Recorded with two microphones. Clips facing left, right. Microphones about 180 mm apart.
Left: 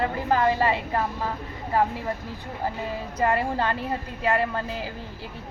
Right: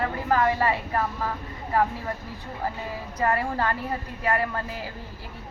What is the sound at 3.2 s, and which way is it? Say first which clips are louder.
Speech: left 1 dB; 25° left (ahead or behind).